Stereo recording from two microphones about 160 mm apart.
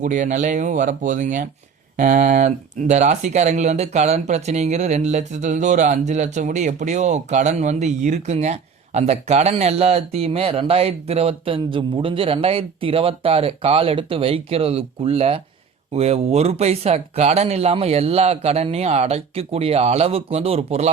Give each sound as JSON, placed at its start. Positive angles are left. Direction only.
{"t": 0.0, "sound": "speech", "side_deg": -50}